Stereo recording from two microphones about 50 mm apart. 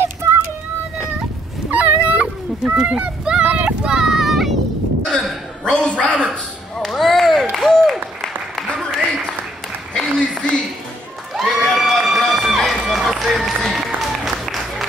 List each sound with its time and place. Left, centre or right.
1.7 s dog: right
2.9 s a child's voice: centre
3.4 s a sound: right
3.8 s vehicle: centre
5.7 s a woman's voice: centre
6.8 s a sound: centre
7.5 s applause: centre
9.9 s a sound: centre
11.3 s run: centre
13.4 s applause: centre